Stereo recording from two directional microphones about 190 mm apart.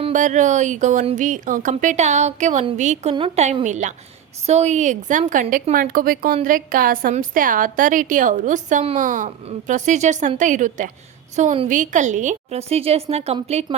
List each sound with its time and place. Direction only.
0.0 s a woman's voice: 40° right (ahead or behind)